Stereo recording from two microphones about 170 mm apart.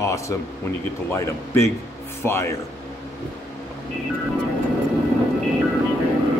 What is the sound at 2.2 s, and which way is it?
Speech, 15° left (ahead or behind).